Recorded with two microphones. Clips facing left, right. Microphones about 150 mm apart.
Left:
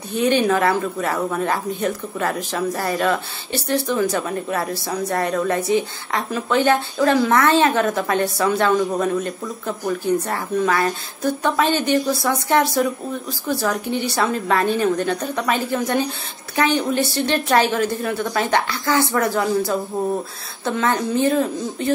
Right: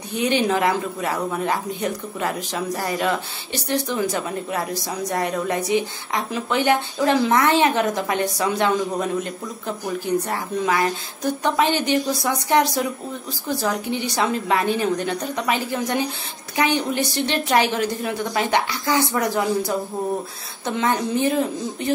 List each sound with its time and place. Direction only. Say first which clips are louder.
0.1 s speech: left 3 dB; 15° right (ahead or behind)